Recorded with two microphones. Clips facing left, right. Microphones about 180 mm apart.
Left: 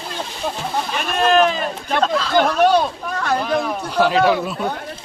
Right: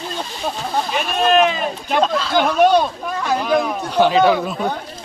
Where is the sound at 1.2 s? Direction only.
5° right (ahead or behind).